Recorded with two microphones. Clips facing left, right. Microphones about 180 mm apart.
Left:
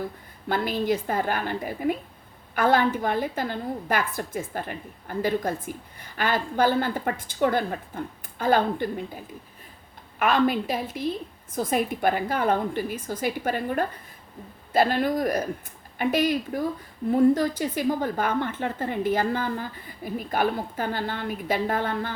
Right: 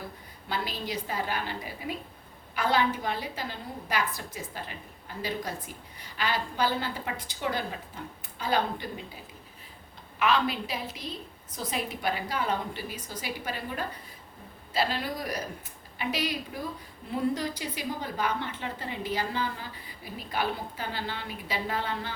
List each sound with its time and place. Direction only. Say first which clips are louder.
0.4 s a woman's voice: left 9 dB; 50° left (ahead or behind)
10.2 s a woman's voice: left 5 dB; 50° left (ahead or behind)